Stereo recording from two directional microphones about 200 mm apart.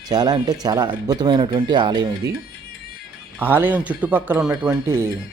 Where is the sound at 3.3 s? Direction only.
10° right (ahead or behind).